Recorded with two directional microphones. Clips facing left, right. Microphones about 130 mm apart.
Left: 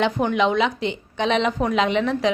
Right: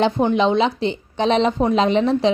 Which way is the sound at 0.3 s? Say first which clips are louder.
Right 3 dB; 30° right (ahead or behind).